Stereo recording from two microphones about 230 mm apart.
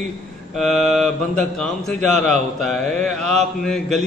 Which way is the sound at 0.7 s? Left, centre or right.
Right.